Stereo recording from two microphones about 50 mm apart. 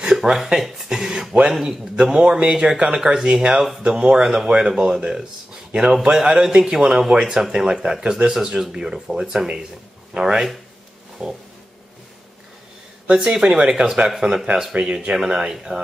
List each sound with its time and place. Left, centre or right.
0.0 s speech: centre
13.1 s speech: centre